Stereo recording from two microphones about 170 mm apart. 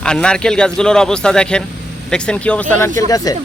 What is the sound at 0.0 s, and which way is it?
A man's voice, 5° left (ahead or behind).